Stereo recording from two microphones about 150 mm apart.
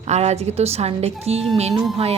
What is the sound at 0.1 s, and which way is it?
Speech, 45° right (ahead or behind).